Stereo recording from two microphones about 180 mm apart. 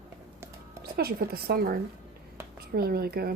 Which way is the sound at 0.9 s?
60° right (ahead or behind).